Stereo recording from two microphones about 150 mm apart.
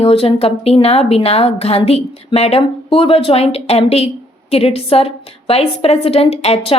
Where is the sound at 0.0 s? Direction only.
40° left (ahead or behind).